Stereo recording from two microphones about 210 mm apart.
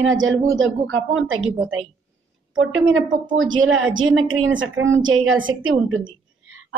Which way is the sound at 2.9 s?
70° right (ahead or behind).